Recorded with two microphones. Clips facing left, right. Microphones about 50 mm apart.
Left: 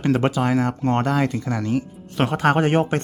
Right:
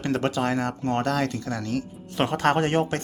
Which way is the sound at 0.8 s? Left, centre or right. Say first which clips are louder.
Left 4 dB; left.